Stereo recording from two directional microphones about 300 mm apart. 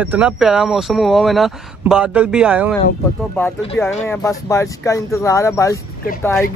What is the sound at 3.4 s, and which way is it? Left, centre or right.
Speech, centre.